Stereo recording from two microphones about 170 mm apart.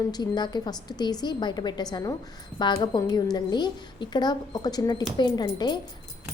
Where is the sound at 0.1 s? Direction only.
25° left (ahead or behind).